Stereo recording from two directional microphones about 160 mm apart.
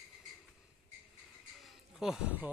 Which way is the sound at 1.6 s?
Centre (ahead or behind).